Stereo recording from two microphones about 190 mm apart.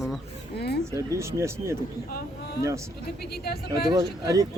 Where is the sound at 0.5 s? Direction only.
60° left (ahead or behind).